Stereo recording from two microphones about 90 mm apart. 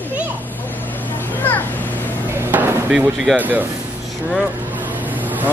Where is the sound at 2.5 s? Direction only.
20° right (ahead or behind).